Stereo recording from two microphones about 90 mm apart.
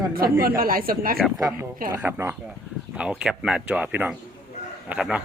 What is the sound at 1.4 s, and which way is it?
Speech, 40° right (ahead or behind).